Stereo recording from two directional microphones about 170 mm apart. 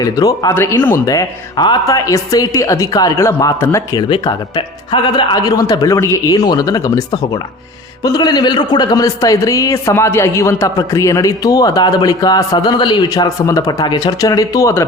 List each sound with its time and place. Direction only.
0.0 s a man's voice: 20° left (ahead or behind)
4.1 s a man's voice: 25° left (ahead or behind)